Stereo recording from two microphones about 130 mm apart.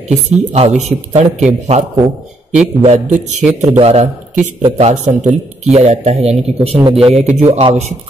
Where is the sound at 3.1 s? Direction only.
65° right (ahead or behind).